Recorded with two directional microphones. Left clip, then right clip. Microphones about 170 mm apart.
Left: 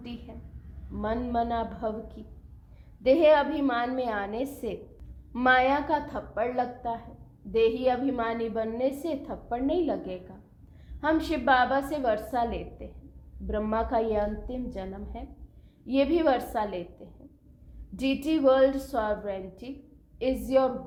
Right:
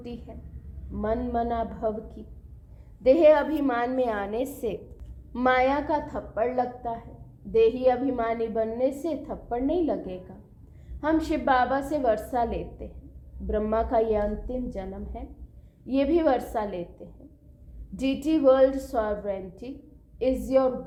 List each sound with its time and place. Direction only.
0.0 s a woman's voice: 40° right (ahead or behind)